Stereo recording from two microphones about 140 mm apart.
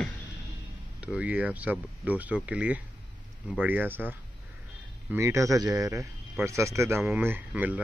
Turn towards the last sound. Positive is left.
turn(degrees=-10)  # may be behind; listen again after turning